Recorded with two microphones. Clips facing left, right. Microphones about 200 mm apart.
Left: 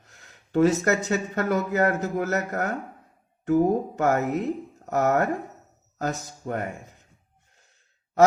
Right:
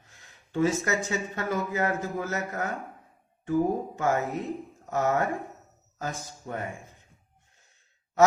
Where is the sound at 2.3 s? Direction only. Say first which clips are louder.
Left 5 dB; 65° left (ahead or behind).